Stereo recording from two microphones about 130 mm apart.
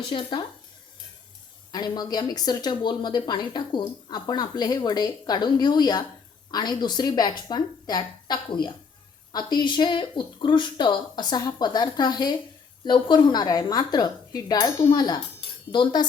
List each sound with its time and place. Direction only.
0.1 s speech: 40° left (ahead or behind)
1.7 s speech: 30° left (ahead or behind)